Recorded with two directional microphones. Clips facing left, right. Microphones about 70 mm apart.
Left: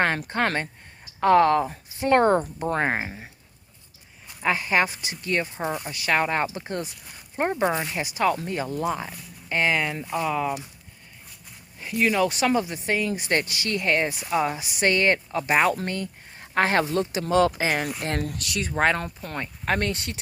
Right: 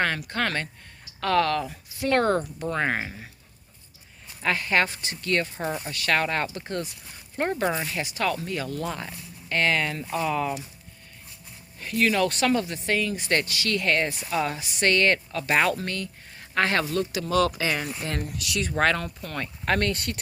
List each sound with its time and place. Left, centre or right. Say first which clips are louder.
0.0 s speech: left 3 dB; left
4.4 s speech: left 1 dB; centre
11.8 s speech: left 1 dB; centre; by 17.7 s left
18.0 s speech: left 3 dB; left
18.4 s speech: right 1 dB; left
18.8 s speech: left 1 dB; left
19.6 s speech: right 1 dB; centre